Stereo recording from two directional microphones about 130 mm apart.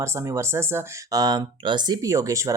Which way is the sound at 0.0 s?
20° right (ahead or behind).